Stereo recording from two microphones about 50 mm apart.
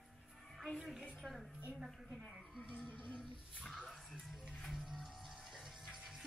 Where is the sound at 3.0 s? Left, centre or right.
Centre.